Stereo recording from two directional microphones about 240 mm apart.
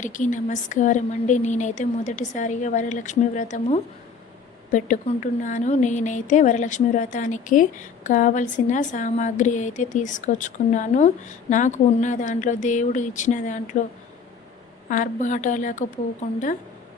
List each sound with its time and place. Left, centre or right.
0.0 s a woman's voice: left
14.8 s a woman's voice: left